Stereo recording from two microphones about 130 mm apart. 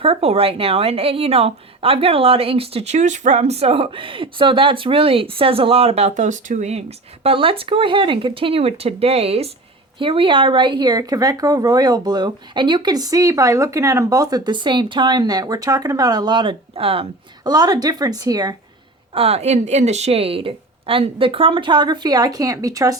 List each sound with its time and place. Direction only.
0.0 s a woman's voice: 50° right (ahead or behind)
17.4 s speech: 30° right (ahead or behind)
19.1 s a woman's voice: 50° right (ahead or behind); by 23.0 s 25° right (ahead or behind)